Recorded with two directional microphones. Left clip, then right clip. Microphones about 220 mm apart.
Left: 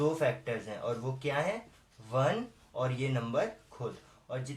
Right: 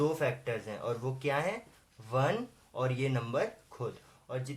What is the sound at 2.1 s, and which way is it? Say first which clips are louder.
Speech: left 1 dB; 35° right (ahead or behind).